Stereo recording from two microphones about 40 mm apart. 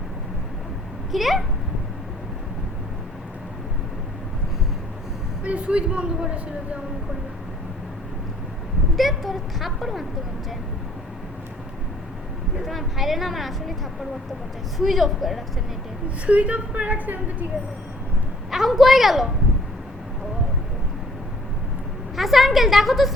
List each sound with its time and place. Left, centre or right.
1.1 s a woman's voice: centre
5.5 s speech: right
9.0 s a woman's voice: centre
12.6 s a woman's voice: centre
14.8 s a woman's voice: centre
16.2 s a woman's voice: right
18.5 s a woman's voice: centre
22.1 s a woman's voice: centre